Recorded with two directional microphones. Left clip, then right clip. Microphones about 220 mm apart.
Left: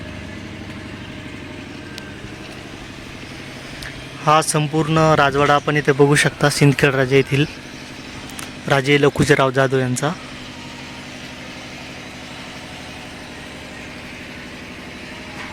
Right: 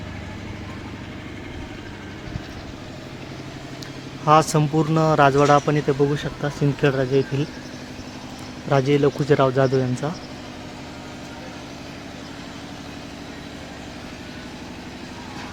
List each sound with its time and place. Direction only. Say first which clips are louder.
4.3 s speech: left 1 dB; 5° left (ahead or behind)
5.9 s speech: left 7 dB; 25° left (ahead or behind)
8.7 s speech: left 4 dB; 15° left (ahead or behind)
9.6 s speech: left 2 dB; 25° left (ahead or behind)
9.9 s speech: left 5 dB; 15° left (ahead or behind)